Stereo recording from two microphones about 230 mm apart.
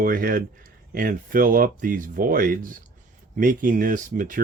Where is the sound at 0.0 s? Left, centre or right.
Right.